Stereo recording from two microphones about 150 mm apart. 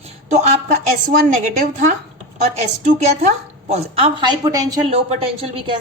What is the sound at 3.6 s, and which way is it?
Speech, 40° right (ahead or behind).